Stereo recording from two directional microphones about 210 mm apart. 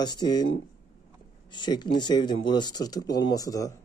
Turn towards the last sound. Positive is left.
turn(degrees=15)  # may be behind; listen again after turning